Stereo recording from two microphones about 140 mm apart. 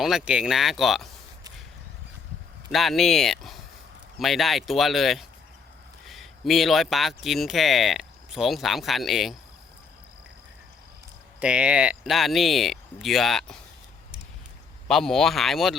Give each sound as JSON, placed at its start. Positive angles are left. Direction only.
{"t": 0.0, "sound": "speech", "side_deg": -5}
{"t": 2.7, "sound": "speech", "side_deg": 0}
{"t": 11.3, "sound": "speech", "side_deg": -5}
{"t": 14.8, "sound": "speech", "side_deg": 5}